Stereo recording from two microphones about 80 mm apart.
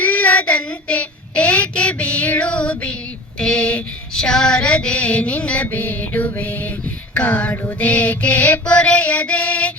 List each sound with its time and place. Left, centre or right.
0.0 s child singing: centre
3.4 s a sound: centre
7.1 s music: centre
7.8 s mantra: centre